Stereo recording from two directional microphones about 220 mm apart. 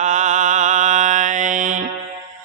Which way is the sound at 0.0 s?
35° right (ahead or behind).